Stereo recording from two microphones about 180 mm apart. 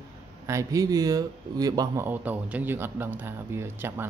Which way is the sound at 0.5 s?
15° right (ahead or behind).